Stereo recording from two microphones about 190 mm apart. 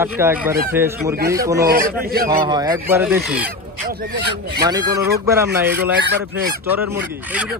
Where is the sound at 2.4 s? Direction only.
20° right (ahead or behind).